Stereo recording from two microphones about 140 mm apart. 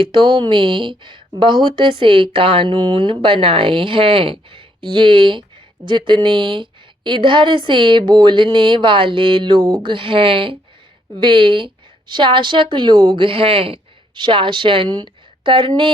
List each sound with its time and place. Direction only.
0.0 s a woman's voice: 35° right (ahead or behind)